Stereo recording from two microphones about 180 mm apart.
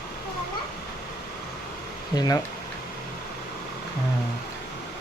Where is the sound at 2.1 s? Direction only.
20° left (ahead or behind).